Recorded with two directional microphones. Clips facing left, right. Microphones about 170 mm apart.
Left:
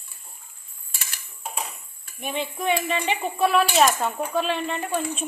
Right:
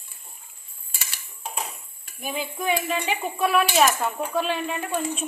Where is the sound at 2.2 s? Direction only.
5° right (ahead or behind).